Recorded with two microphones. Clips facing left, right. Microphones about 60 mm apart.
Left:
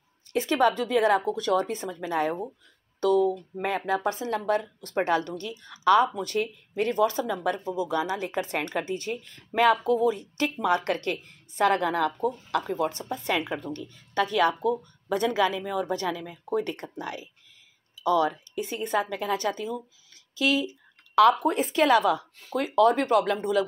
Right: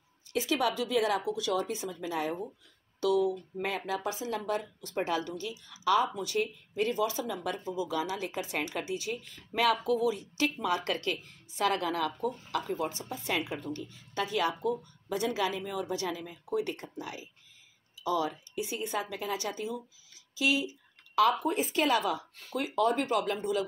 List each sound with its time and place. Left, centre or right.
0.3 s a woman's voice: left
20.3 s a sound: left
21.5 s a woman's voice: left